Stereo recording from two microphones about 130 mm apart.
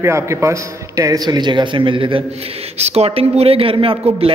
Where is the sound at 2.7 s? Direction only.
55° right (ahead or behind).